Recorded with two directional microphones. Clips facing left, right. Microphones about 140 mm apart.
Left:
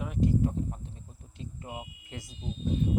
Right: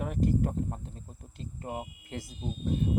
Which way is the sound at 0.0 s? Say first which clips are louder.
Left 1 dB; 50° right (ahead or behind).